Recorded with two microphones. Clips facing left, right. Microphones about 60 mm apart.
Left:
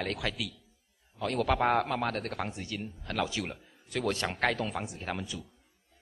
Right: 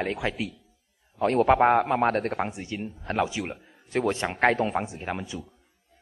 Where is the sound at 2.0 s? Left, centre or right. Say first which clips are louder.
Right 8 dB; right.